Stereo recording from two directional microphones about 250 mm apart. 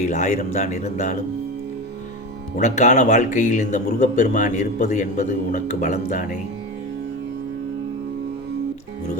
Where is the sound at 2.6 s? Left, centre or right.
Left.